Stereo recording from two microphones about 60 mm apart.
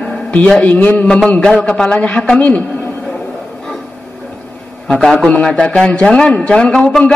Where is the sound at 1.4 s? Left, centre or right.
Centre.